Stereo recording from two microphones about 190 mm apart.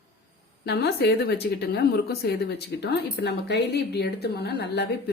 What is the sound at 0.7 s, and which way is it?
A woman's voice, 60° left (ahead or behind).